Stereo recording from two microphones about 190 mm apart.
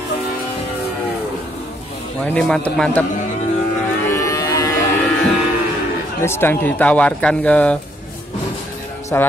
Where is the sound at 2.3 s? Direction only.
5° left (ahead or behind).